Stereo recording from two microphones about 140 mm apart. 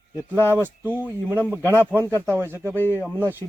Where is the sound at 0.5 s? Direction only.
15° right (ahead or behind).